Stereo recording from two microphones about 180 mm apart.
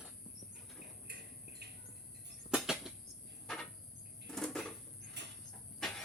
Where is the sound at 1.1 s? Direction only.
65° right (ahead or behind).